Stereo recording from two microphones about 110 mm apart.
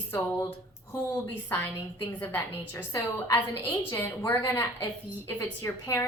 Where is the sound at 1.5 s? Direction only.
20° left (ahead or behind).